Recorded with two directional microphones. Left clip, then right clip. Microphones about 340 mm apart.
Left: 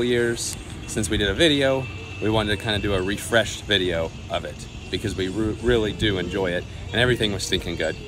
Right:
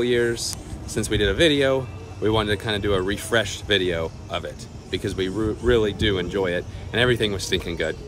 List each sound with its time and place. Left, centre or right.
0.0 s speech: centre